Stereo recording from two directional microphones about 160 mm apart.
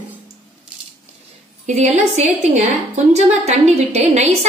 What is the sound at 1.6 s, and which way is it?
A woman's voice, 45° right (ahead or behind).